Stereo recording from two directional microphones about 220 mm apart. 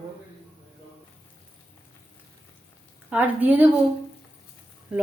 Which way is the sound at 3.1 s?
5° right (ahead or behind).